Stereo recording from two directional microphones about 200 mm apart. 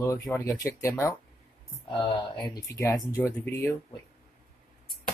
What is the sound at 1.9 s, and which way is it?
Speech, 25° left (ahead or behind).